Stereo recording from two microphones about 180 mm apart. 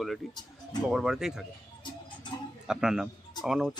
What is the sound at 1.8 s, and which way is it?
Music, 25° left (ahead or behind).